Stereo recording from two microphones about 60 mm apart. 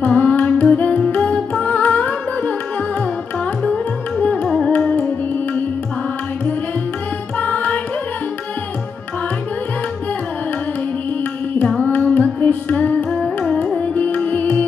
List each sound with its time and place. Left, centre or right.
0.0 s music: left
1.5 s carnatic music: left
3.6 s music: left
4.6 s carnatic music: left
7.3 s music: left
11.6 s carnatic music: centre
11.9 s music: left
13.1 s carnatic music: centre
13.7 s music: left